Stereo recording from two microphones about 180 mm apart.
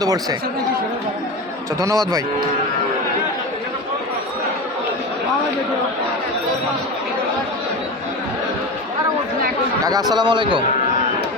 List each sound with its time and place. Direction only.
0.0 s a man's voice: 20° right (ahead or behind)
9.8 s a man's voice: 20° right (ahead or behind)